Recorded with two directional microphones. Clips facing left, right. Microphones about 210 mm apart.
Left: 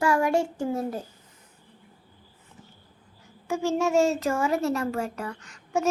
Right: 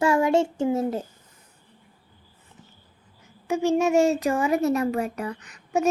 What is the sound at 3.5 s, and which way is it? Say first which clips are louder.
Speech: right 4 dB; 15° right (ahead or behind).